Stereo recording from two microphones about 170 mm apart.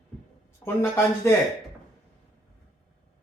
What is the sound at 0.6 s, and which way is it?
Speech, 15° left (ahead or behind).